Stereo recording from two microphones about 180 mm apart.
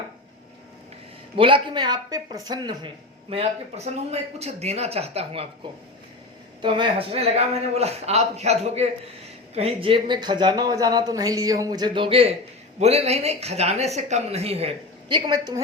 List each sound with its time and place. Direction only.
1.4 s speech: 30° right (ahead or behind)
6.6 s speech: 25° right (ahead or behind)
15.3 s speech: 20° right (ahead or behind)